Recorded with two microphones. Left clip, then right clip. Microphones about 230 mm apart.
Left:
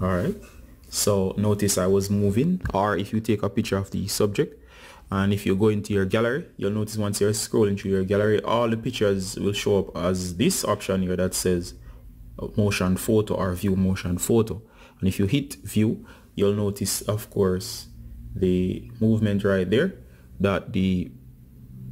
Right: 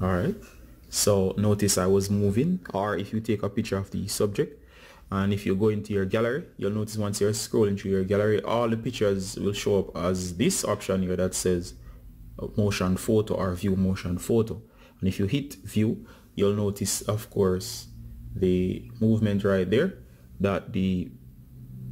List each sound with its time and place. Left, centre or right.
0.0 s speech: centre